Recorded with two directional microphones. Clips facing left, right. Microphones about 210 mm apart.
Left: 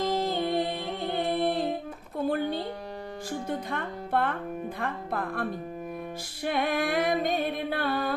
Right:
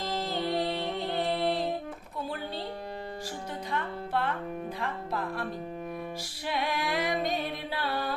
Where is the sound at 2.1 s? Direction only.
55° left (ahead or behind).